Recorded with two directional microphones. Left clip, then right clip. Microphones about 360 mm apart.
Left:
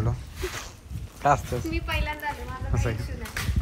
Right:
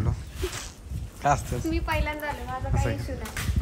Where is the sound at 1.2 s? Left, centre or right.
Centre.